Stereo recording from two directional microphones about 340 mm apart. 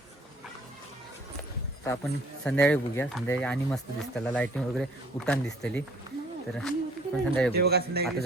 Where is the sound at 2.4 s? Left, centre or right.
Centre.